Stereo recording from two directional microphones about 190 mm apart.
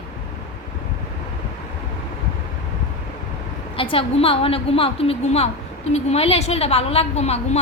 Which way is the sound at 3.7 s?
30° left (ahead or behind).